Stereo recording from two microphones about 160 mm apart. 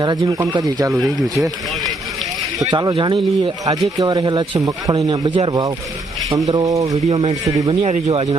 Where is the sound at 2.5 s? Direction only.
25° right (ahead or behind).